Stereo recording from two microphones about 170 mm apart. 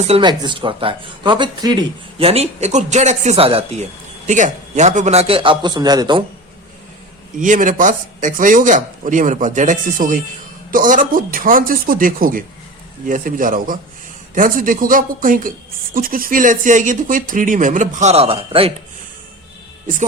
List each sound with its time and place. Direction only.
0.0 s speech: 35° right (ahead or behind)
7.3 s a man's voice: 50° right (ahead or behind); by 18.7 s 35° right (ahead or behind)